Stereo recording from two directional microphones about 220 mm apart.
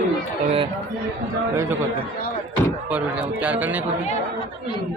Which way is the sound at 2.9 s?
5° right (ahead or behind).